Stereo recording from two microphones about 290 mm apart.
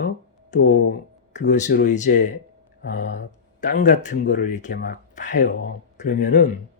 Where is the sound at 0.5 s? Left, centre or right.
Left.